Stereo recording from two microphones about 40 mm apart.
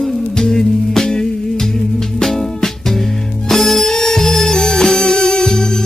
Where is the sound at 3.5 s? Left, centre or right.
Centre.